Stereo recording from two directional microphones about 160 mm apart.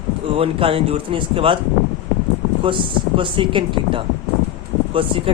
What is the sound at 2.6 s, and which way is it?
Speech, 35° right (ahead or behind).